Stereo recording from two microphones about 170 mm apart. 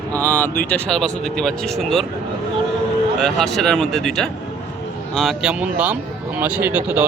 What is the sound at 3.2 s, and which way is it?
Speech, centre (ahead or behind).